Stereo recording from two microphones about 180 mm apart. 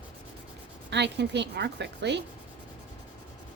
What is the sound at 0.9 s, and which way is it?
Speech, 70° right (ahead or behind).